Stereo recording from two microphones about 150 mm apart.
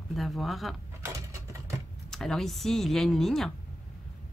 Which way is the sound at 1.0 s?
20° right (ahead or behind).